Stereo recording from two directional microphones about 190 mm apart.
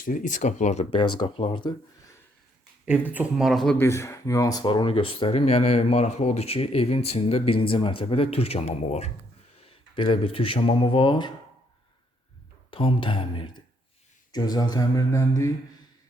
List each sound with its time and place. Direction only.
0.0 s speech: 45° left (ahead or behind); by 2.1 s 25° left (ahead or behind)
3.1 s speech: 5° right (ahead or behind); by 11.3 s 25° left (ahead or behind)
12.7 s speech: 25° left (ahead or behind)